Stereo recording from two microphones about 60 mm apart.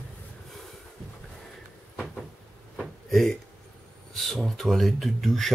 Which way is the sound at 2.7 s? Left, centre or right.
Centre.